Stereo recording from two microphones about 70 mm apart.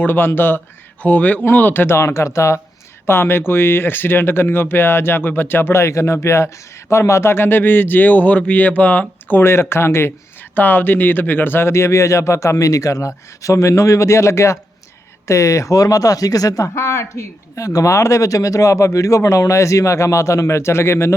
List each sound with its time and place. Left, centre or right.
0.0 s a man's voice: left
2.0 s speech: left
3.1 s a man's voice: left
10.5 s speech: left
16.7 s speech: left